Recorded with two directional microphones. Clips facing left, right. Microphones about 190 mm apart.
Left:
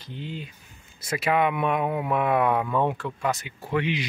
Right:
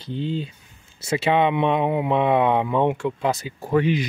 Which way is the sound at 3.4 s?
45° right (ahead or behind).